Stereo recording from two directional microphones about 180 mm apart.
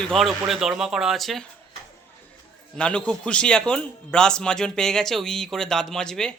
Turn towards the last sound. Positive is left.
turn(degrees=5)  # may be behind; listen again after turning